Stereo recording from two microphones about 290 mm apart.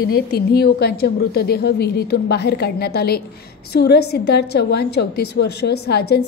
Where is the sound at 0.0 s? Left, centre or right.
Left.